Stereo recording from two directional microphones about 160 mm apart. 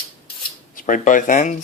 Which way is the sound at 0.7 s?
55° left (ahead or behind).